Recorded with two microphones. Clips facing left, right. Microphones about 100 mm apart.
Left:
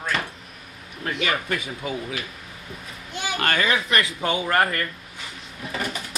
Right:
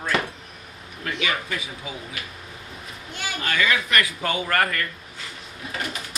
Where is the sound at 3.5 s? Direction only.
30° left (ahead or behind).